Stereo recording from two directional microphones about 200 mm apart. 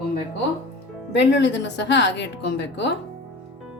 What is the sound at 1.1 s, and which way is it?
A woman's voice, 60° left (ahead or behind).